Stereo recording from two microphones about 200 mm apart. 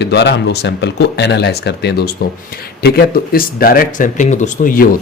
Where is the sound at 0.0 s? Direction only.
60° left (ahead or behind).